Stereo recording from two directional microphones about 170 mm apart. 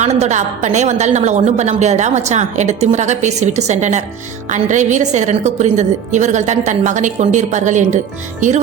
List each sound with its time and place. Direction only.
0.0 s a woman's voice: 40° right (ahead or behind)